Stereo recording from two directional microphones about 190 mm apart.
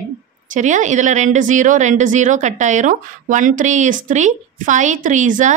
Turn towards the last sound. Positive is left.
turn(degrees=-40)  # may be behind; listen again after turning